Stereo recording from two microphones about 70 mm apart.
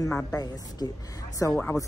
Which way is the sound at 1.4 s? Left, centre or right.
Left.